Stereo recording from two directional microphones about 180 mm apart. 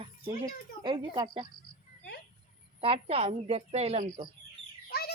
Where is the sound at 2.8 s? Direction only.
30° right (ahead or behind).